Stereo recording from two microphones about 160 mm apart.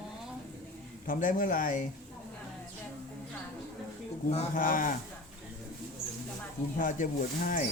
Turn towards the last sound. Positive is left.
turn(degrees=60)  # may be behind; listen again after turning